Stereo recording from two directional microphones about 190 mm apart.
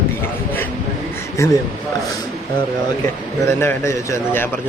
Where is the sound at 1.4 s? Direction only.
15° left (ahead or behind).